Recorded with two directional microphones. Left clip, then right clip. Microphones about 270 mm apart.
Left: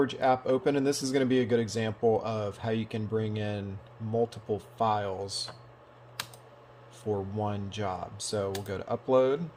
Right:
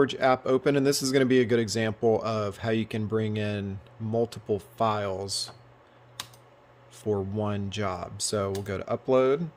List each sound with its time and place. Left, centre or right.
0.0 s speech: right
7.0 s speech: right